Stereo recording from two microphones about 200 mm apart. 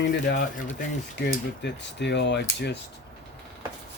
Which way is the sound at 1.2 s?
60° left (ahead or behind).